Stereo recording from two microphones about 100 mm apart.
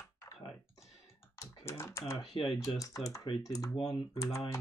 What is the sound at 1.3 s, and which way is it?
Speech, 25° left (ahead or behind).